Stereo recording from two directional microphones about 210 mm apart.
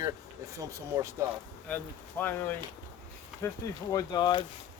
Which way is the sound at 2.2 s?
10° left (ahead or behind).